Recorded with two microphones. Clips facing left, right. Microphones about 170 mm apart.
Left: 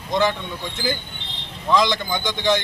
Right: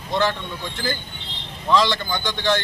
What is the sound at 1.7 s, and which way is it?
Speech, 15° left (ahead or behind).